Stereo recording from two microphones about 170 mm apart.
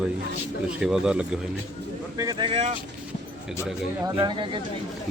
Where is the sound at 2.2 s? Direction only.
25° right (ahead or behind).